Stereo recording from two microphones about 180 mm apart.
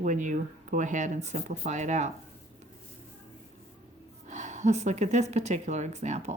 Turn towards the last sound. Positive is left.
turn(degrees=-40)  # may be behind; listen again after turning